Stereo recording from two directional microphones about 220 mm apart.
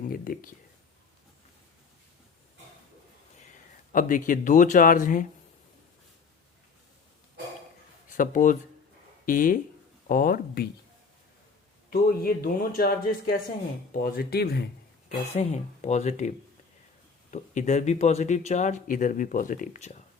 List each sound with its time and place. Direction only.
0.1 s speech: 40° left (ahead or behind)
3.3 s speech: 35° left (ahead or behind)
8.1 s speech: 35° left (ahead or behind)
11.9 s speech: 40° left (ahead or behind)
15.3 s speech: 30° left (ahead or behind)
17.3 s speech: 35° left (ahead or behind)